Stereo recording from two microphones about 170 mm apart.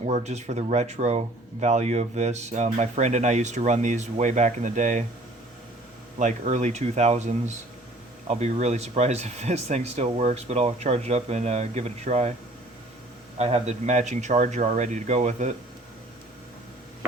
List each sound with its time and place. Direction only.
0.0 s speech: 40° right (ahead or behind)
6.1 s speech: 45° right (ahead or behind)
13.4 s speech: 40° right (ahead or behind)